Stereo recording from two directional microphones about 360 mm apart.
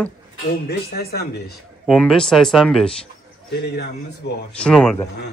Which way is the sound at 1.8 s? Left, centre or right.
Centre.